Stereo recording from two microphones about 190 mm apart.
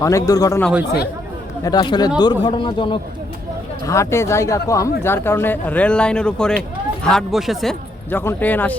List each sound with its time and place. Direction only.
0.0 s speech: 15° left (ahead or behind)
1.6 s a man's voice: 25° left (ahead or behind)
3.8 s speech: 15° left (ahead or behind)